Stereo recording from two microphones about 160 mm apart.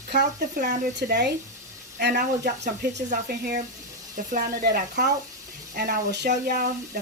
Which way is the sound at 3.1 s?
65° right (ahead or behind).